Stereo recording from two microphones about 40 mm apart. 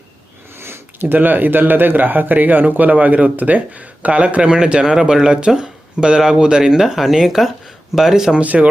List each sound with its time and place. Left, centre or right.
0.6 s a sound: right
1.0 s speech: right; by 8.4 s centre
8.4 s speech: right